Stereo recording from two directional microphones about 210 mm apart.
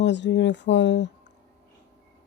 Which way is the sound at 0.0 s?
55° left (ahead or behind).